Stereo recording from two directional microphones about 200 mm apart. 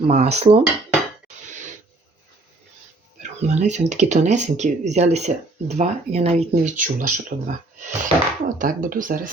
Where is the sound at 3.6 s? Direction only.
35° right (ahead or behind).